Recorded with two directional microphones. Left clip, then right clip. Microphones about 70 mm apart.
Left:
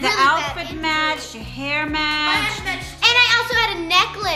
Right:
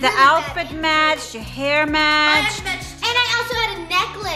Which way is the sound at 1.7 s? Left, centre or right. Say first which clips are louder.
Right 5 dB; right.